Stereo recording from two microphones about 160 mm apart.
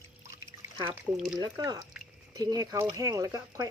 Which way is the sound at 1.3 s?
25° right (ahead or behind).